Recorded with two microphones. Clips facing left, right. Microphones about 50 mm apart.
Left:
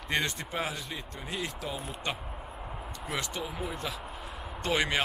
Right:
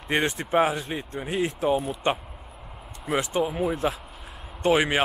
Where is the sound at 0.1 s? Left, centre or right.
Right.